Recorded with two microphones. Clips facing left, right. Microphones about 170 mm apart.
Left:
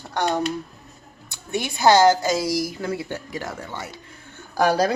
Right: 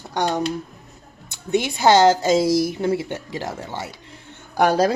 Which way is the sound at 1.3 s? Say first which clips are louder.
Right 6 dB; 20° right (ahead or behind).